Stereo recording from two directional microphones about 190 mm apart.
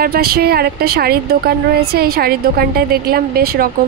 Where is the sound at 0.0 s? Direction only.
55° right (ahead or behind).